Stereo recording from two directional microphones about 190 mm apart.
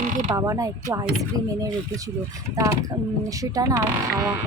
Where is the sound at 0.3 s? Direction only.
15° right (ahead or behind).